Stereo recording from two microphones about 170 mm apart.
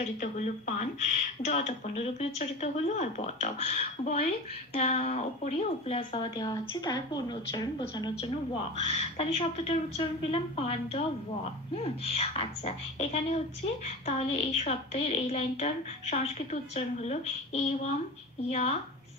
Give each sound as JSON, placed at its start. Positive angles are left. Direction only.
{"t": 0.2, "sound": "a woman's voice", "side_deg": 45}
{"t": 8.2, "sound": "a woman's voice", "side_deg": 35}